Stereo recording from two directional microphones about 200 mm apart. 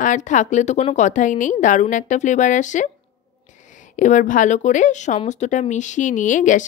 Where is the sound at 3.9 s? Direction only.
40° left (ahead or behind).